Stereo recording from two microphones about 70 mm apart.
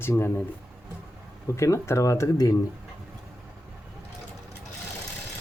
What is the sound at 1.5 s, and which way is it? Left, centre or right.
Speech, left.